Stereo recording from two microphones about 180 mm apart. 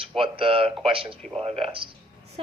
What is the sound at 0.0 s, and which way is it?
A woman's voice, 30° right (ahead or behind).